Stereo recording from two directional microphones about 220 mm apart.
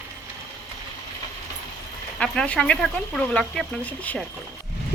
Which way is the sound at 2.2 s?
5° left (ahead or behind).